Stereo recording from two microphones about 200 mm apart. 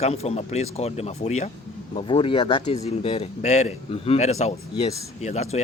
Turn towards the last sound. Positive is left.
turn(degrees=35)  # may be behind; listen again after turning